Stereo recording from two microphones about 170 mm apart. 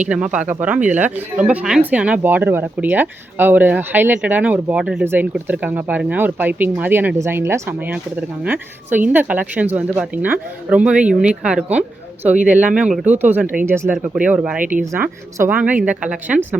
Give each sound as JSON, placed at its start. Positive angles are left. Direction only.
{"t": 0.1, "sound": "speech", "side_deg": -5}
{"t": 14.6, "sound": "speech", "side_deg": -50}
{"t": 15.4, "sound": "speech", "side_deg": -10}